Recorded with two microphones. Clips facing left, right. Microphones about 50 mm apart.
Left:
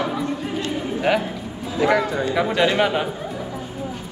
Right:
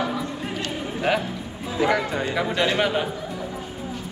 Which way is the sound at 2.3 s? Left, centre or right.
Centre.